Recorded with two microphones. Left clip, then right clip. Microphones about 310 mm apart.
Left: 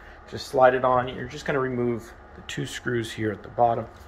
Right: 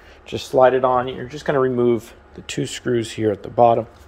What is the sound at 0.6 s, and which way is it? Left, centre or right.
Speech, right.